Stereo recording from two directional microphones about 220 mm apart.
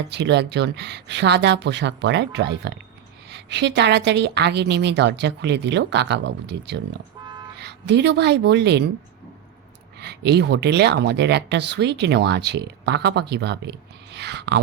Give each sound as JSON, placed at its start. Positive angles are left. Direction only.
{"t": 0.1, "sound": "speech", "side_deg": -50}
{"t": 7.3, "sound": "a sound", "side_deg": -20}
{"t": 7.6, "sound": "speech", "side_deg": -50}
{"t": 10.0, "sound": "speech", "side_deg": -50}